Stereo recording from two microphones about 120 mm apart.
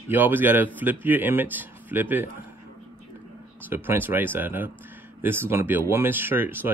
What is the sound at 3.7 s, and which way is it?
Speech, 15° right (ahead or behind).